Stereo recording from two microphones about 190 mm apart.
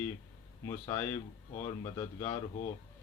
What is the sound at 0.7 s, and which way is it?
Speech, 20° left (ahead or behind).